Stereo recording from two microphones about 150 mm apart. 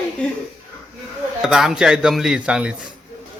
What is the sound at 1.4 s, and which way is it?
Speech, 5° right (ahead or behind).